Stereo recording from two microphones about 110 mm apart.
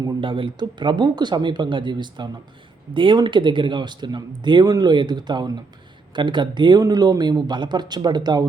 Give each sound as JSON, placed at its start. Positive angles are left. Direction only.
{"t": 0.0, "sound": "speech", "side_deg": -45}